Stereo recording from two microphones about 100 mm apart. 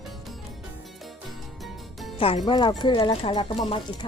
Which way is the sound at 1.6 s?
Centre (ahead or behind).